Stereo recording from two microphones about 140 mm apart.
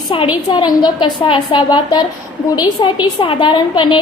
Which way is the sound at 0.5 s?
30° left (ahead or behind).